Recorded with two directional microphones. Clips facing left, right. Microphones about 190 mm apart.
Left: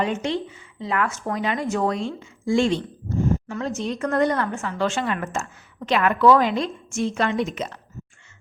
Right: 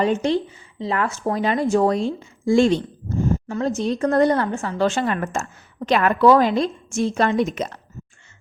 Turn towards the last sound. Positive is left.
turn(degrees=-45)  # may be behind; listen again after turning